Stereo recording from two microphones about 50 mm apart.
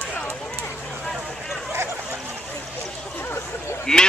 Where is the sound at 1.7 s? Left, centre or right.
Right.